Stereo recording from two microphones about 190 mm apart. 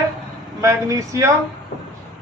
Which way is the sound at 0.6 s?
15° right (ahead or behind).